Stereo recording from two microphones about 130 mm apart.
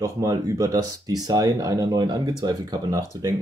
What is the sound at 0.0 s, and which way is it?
Speech, 25° right (ahead or behind).